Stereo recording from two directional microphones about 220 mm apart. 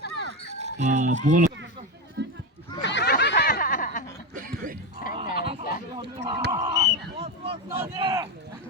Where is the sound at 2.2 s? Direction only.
50° right (ahead or behind).